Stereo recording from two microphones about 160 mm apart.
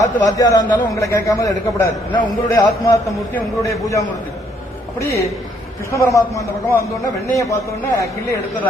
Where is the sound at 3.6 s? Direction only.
20° left (ahead or behind).